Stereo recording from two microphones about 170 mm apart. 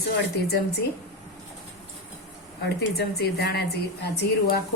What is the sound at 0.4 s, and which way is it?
Speech, 65° left (ahead or behind).